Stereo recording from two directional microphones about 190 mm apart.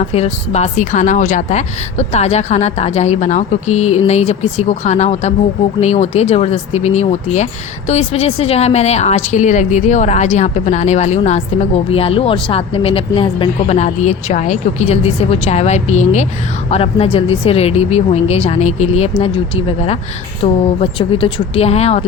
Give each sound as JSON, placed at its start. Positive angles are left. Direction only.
{"t": 0.0, "sound": "a woman's voice", "side_deg": 35}